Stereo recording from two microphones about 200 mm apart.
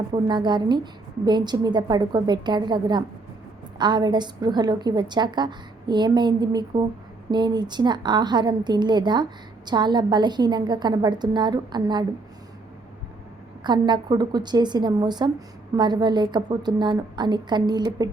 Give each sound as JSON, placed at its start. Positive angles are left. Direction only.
{"t": 0.1, "sound": "a woman's voice", "side_deg": -20}
{"t": 13.7, "sound": "a woman's voice", "side_deg": -20}